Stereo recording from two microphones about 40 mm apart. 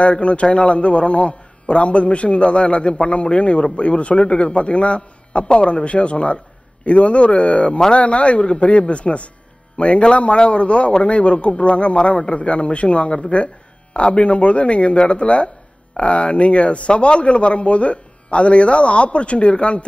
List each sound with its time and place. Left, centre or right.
0.0 s a man's voice: left